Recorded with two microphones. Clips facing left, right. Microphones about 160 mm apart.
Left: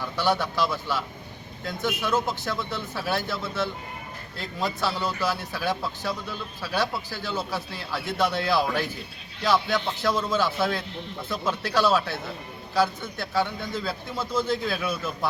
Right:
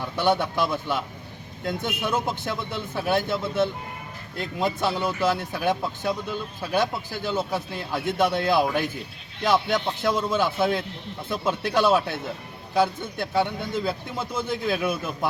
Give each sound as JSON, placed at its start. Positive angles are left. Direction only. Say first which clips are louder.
{"t": 0.0, "sound": "a man's voice", "louder": "right 2 dB", "side_deg": -20}